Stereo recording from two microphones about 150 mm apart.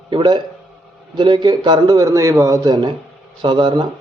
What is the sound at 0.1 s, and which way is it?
A man's voice, 30° right (ahead or behind).